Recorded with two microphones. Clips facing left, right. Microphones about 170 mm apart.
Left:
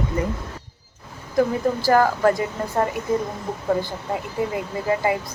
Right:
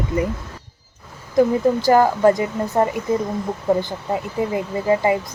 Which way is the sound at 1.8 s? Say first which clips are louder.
Right 2 dB; 20° right (ahead or behind).